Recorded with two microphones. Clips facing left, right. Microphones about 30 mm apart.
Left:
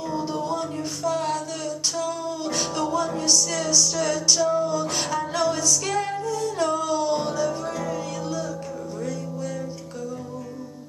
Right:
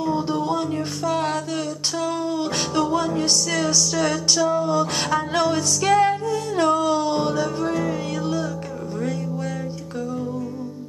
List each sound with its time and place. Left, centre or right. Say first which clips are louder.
0.0 s music: right 5 dB; right
4.4 s music: right 2 dB; centre
4.6 s music: right 4 dB; right